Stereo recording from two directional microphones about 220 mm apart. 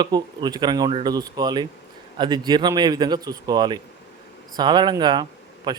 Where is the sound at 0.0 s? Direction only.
20° right (ahead or behind).